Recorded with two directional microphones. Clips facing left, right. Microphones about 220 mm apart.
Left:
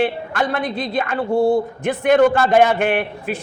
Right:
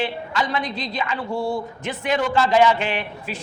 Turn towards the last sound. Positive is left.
turn(degrees=55)  # may be behind; listen again after turning